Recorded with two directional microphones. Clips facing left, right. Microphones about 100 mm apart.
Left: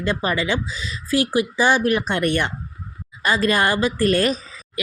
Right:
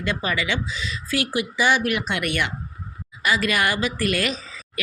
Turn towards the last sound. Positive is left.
turn(degrees=35)  # may be behind; listen again after turning